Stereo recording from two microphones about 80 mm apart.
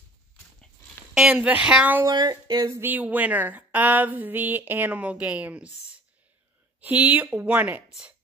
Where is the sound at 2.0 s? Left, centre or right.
Right.